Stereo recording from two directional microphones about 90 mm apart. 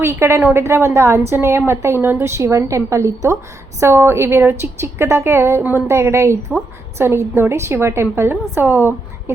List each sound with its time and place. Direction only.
0.0 s a woman's voice: 30° right (ahead or behind)